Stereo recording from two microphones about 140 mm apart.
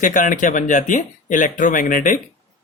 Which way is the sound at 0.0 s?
65° left (ahead or behind).